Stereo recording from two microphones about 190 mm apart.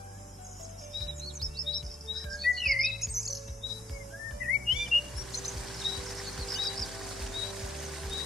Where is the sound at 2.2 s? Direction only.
Centre (ahead or behind).